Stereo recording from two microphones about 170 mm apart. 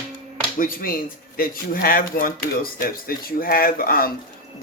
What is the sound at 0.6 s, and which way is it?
A man's voice, 55° left (ahead or behind).